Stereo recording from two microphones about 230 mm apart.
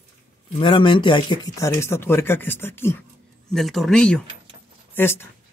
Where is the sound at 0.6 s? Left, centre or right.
Left.